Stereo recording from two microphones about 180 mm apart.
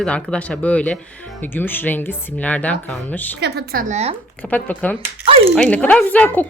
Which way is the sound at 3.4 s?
65° right (ahead or behind).